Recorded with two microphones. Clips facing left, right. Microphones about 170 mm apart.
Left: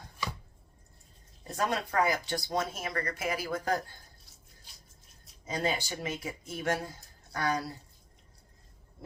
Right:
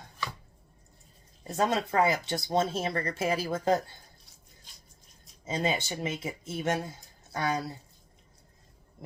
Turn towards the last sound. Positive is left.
turn(degrees=-20)  # may be behind; listen again after turning